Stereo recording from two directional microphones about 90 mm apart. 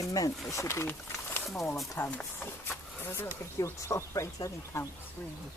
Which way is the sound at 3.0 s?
25° left (ahead or behind).